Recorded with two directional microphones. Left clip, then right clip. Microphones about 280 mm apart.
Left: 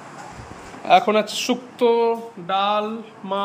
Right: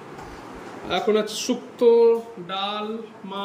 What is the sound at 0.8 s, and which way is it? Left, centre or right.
Speech, centre.